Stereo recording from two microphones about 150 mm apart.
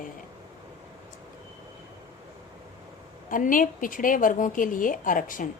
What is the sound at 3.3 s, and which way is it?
Speech, 65° left (ahead or behind).